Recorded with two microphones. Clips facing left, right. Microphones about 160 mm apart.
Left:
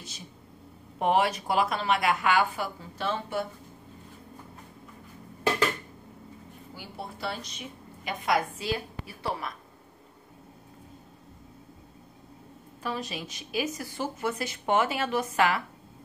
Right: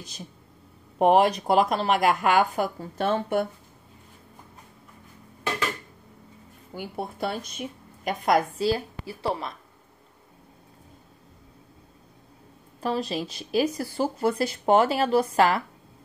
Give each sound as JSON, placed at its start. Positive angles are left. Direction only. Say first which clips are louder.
{"t": 0.9, "sound": "a woman's voice", "louder": "right 6 dB", "side_deg": -45}
{"t": 6.7, "sound": "a woman's voice", "louder": "right 7 dB", "side_deg": -50}
{"t": 12.8, "sound": "speech", "louder": "right 7 dB", "side_deg": -35}